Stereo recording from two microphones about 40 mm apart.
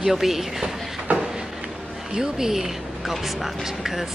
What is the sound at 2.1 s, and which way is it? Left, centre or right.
A woman's voice, centre.